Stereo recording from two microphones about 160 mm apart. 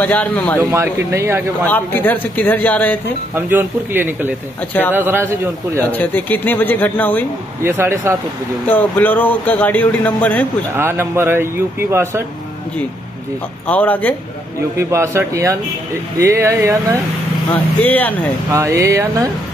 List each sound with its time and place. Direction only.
0.0 s speech: 10° left (ahead or behind)
0.6 s speech: 15° right (ahead or behind)
1.7 s speech: 10° left (ahead or behind)
3.3 s speech: 15° right (ahead or behind)
5.9 s speech: 10° left (ahead or behind)
7.6 s speech: 15° right (ahead or behind)
8.6 s speech: 10° left (ahead or behind)
10.8 s speech: 15° right (ahead or behind)
13.7 s speech: 10° left (ahead or behind)
14.8 s speech: 15° right (ahead or behind)
17.5 s speech: 10° left (ahead or behind)
18.5 s speech: 20° right (ahead or behind)